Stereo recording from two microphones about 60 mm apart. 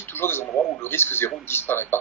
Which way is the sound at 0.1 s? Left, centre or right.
Left.